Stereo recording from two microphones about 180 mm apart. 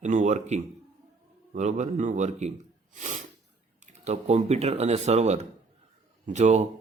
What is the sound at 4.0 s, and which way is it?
Speech, 40° right (ahead or behind).